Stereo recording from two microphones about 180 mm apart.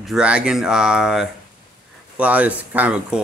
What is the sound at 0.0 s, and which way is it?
Speech, 5° right (ahead or behind).